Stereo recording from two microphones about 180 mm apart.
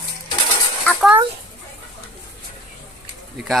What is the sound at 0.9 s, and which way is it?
Speech, 10° left (ahead or behind).